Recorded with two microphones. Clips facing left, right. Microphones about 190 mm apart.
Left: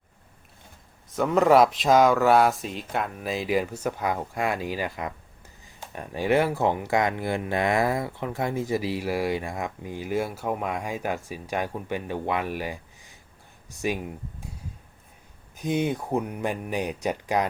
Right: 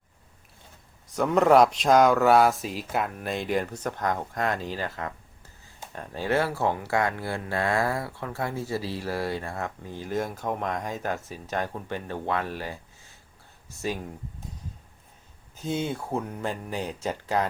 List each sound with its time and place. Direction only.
1.0 s speech: centre (ahead or behind)
15.5 s speech: 15° left (ahead or behind)